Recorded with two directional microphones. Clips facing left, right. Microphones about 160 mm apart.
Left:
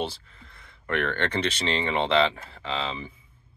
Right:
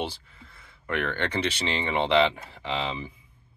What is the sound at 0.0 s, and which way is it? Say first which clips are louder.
Speech: left 1 dB; 10° right (ahead or behind).